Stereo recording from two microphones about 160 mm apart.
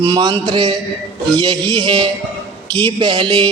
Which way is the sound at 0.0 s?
25° right (ahead or behind).